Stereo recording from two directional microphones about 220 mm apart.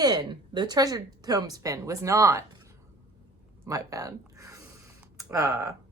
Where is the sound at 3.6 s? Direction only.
15° right (ahead or behind).